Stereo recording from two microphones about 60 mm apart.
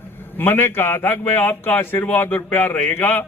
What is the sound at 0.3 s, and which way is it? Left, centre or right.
A man's voice, left.